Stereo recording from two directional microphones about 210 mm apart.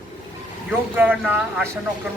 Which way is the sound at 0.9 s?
10° right (ahead or behind).